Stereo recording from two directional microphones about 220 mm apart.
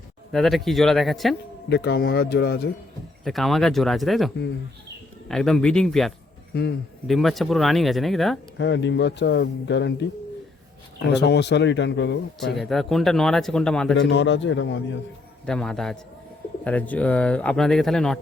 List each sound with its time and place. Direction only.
0.3 s speech: centre (ahead or behind)
1.7 s speech: 50° left (ahead or behind)
3.2 s speech: centre (ahead or behind)
5.3 s speech: centre (ahead or behind)
6.5 s a man's voice: 45° left (ahead or behind)
7.1 s speech: centre (ahead or behind)
8.5 s speech: 55° left (ahead or behind)
11.1 s speech: 50° left (ahead or behind)
12.5 s speech: centre (ahead or behind)
13.9 s a man's voice: 55° left (ahead or behind)
15.4 s speech: centre (ahead or behind)